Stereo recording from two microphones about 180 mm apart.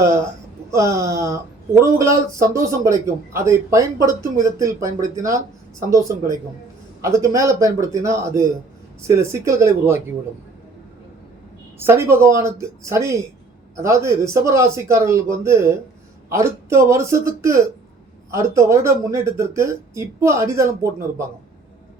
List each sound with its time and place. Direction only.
0.7 s speech: 15° right (ahead or behind)
11.8 s speech: 15° right (ahead or behind)